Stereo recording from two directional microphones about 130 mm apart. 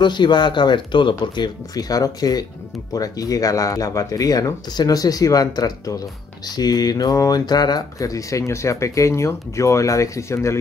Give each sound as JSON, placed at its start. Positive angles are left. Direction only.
{"t": 0.0, "sound": "speech", "side_deg": 35}